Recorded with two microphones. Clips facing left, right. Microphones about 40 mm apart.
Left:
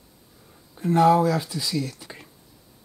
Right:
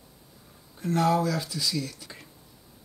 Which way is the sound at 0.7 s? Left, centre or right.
Centre.